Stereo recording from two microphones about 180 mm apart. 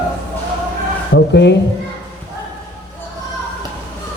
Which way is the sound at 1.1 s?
75° left (ahead or behind).